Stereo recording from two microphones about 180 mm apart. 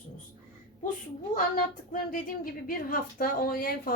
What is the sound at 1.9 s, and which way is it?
A woman's voice, 50° left (ahead or behind).